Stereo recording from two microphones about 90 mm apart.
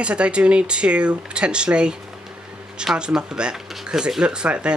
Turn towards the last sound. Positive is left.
turn(degrees=-10)  # may be behind; listen again after turning